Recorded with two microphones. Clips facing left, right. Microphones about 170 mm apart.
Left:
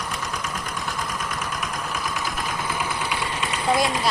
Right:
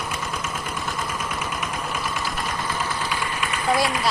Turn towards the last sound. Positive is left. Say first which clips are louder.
# even
turn(degrees=20)  # may be behind; listen again after turning